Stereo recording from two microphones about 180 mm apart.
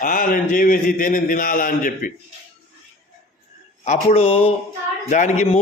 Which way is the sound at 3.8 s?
40° left (ahead or behind).